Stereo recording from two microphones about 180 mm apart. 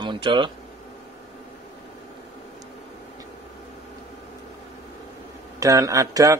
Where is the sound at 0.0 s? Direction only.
25° right (ahead or behind).